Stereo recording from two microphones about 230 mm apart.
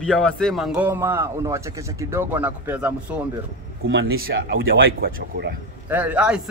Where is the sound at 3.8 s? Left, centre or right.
Right.